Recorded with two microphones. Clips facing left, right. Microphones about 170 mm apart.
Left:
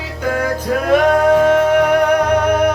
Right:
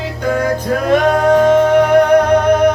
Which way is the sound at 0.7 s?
5° left (ahead or behind).